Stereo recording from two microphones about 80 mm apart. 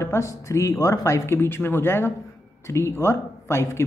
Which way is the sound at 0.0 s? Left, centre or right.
Left.